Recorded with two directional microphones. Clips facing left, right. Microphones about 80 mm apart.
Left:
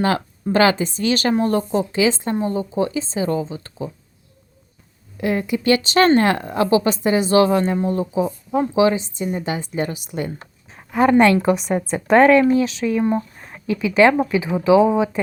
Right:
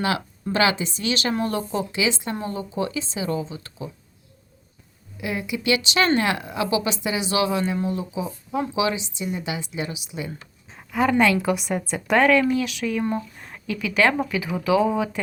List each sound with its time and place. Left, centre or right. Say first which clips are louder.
0.5 s speech: left 5 dB; left
2.3 s speech: left 7 dB; left
5.1 s a woman's voice: left 7 dB; left